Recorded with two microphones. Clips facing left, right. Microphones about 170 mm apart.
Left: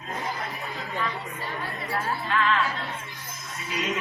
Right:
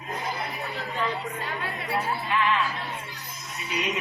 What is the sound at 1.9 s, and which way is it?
Speech, 15° right (ahead or behind).